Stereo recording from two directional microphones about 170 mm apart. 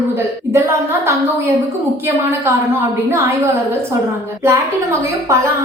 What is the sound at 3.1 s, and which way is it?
A woman's voice, 15° right (ahead or behind).